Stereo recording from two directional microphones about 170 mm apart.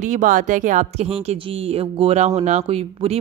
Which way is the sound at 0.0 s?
45° right (ahead or behind).